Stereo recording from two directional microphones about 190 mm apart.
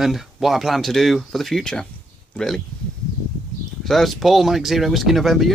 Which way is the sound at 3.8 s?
Centre (ahead or behind).